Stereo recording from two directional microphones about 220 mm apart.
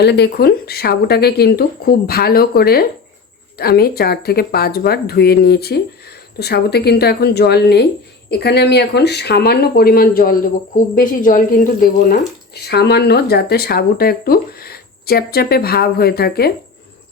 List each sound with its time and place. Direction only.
0.0 s speech: 50° left (ahead or behind)